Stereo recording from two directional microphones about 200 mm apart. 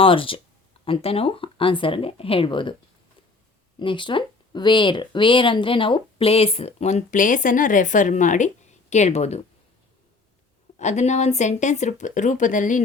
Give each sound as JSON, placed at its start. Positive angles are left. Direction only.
{"t": 0.0, "sound": "speech", "side_deg": 25}
{"t": 3.8, "sound": "speech", "side_deg": 25}
{"t": 10.8, "sound": "speech", "side_deg": 35}